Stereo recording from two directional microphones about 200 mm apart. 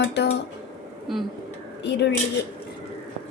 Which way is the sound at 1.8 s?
60° left (ahead or behind).